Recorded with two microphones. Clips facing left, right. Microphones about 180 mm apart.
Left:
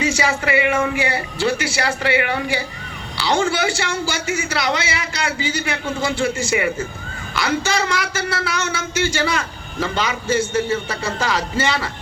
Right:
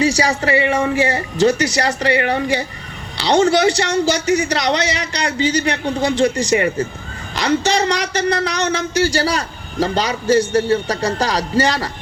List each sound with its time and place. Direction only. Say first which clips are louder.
0.0 s a man's voice: right 4 dB; 35° right (ahead or behind)